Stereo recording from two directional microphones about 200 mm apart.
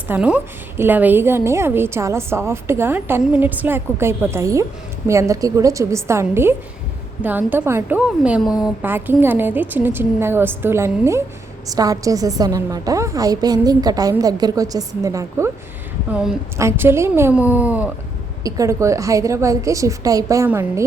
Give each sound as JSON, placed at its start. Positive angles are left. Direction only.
{"t": 0.1, "sound": "a woman's voice", "side_deg": -5}
{"t": 16.6, "sound": "a woman's voice", "side_deg": -10}